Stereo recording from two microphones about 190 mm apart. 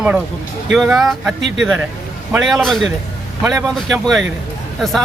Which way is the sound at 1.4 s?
70° right (ahead or behind).